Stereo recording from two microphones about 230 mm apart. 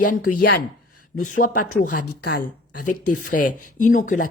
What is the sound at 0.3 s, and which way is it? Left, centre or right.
Speech, left.